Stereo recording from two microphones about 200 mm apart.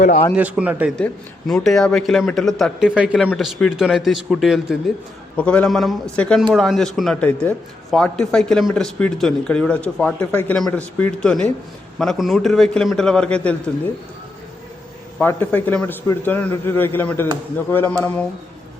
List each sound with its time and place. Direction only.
0.0 s a man's voice: 40° left (ahead or behind)
0.3 s a man's voice: 5° right (ahead or behind)
0.9 s a man's voice: 5° left (ahead or behind)
15.2 s a man's voice: 10° left (ahead or behind)